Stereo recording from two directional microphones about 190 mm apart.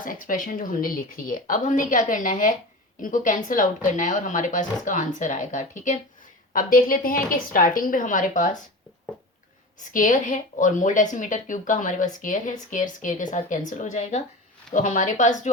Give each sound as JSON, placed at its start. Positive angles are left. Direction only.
{"t": 0.0, "sound": "a woman's voice", "side_deg": 45}
{"t": 9.8, "sound": "a woman's voice", "side_deg": 45}